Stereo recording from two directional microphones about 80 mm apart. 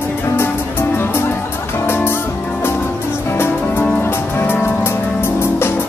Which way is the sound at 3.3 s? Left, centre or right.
Left.